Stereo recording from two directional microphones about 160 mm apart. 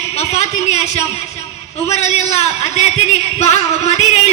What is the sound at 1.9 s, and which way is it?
Music, 40° left (ahead or behind).